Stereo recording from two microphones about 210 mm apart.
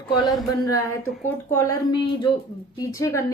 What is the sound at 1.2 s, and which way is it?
Speech, 10° left (ahead or behind).